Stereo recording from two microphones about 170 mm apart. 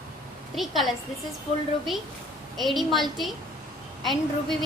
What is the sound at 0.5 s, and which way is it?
Speech, centre (ahead or behind).